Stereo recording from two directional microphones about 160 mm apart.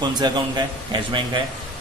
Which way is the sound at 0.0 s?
25° right (ahead or behind).